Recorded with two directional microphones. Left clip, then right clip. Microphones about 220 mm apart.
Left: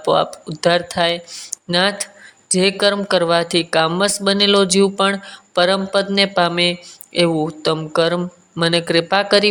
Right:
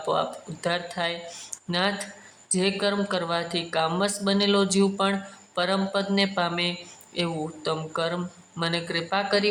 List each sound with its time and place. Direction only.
0.0 s speech: 30° left (ahead or behind)